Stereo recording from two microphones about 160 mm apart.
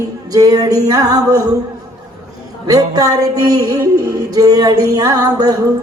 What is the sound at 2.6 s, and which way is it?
Speech, 20° right (ahead or behind).